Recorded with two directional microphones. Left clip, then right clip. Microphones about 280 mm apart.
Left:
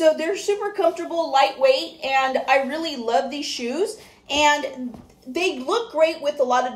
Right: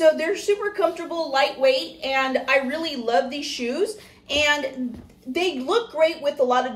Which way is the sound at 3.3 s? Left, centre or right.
Left.